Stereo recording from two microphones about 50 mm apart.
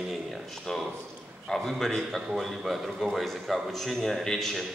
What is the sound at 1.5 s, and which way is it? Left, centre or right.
Speech, centre.